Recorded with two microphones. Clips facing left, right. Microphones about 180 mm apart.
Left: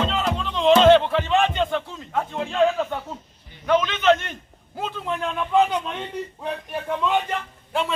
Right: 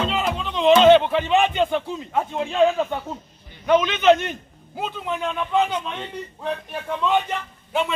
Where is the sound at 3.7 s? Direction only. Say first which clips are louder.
Right 2 dB; 5° right (ahead or behind).